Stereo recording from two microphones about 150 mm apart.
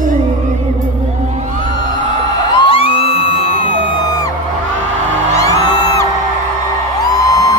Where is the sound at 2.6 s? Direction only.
40° left (ahead or behind).